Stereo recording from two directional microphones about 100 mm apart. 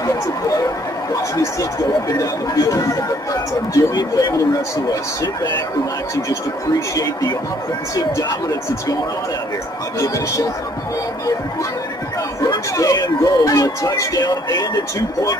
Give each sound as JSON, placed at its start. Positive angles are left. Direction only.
{"t": 0.0, "sound": "speech", "side_deg": 35}
{"t": 7.0, "sound": "speech", "side_deg": 35}
{"t": 9.9, "sound": "speech", "side_deg": 35}
{"t": 12.7, "sound": "speech", "side_deg": 35}